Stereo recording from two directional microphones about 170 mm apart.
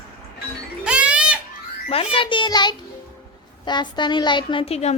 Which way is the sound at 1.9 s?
35° left (ahead or behind).